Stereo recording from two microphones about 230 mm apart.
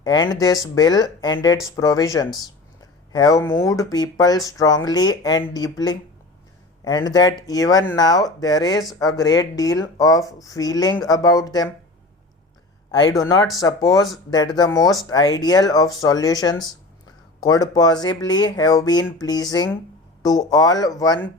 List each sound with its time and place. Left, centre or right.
0.0 s speech: centre
12.9 s speech: centre